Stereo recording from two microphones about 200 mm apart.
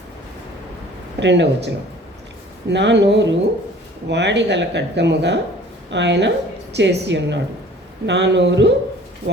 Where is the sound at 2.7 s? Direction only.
60° right (ahead or behind).